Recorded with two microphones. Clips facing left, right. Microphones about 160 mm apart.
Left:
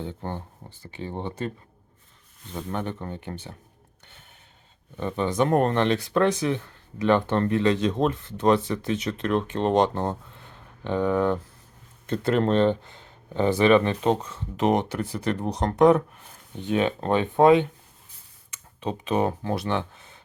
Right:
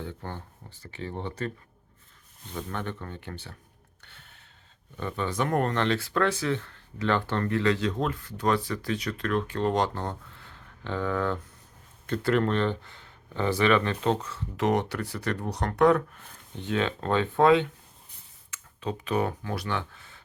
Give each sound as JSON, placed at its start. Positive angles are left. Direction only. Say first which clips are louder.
{"t": 0.0, "sound": "speech", "louder": "left 4 dB", "side_deg": 20}
{"t": 2.7, "sound": "speech", "louder": "left 7 dB", "side_deg": 20}
{"t": 4.0, "sound": "a sound", "louder": "left 1 dB", "side_deg": 20}
{"t": 4.9, "sound": "speech", "louder": "left 5 dB", "side_deg": 20}